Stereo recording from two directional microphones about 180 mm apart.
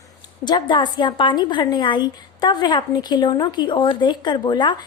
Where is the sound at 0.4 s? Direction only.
25° left (ahead or behind).